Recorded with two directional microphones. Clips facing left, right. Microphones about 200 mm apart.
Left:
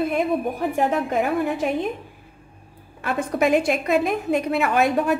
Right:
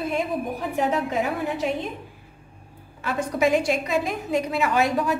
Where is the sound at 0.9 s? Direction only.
55° left (ahead or behind).